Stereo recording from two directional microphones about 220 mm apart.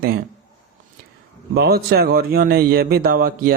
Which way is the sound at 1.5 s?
45° right (ahead or behind).